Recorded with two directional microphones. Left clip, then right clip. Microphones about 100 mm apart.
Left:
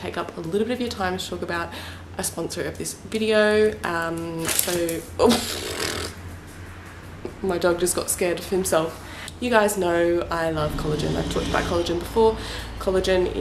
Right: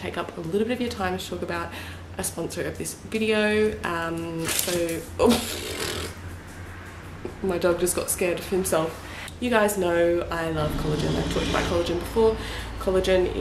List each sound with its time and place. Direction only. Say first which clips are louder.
0.0 s speech: left 1 dB; 15° left (ahead or behind)
7.4 s speech: left 2 dB; 15° left (ahead or behind)